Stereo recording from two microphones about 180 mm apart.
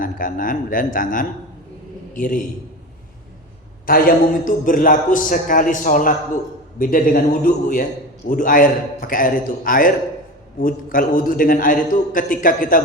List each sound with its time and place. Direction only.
0.0 s a man's voice: 50° left (ahead or behind)
3.8 s a man's voice: 55° left (ahead or behind)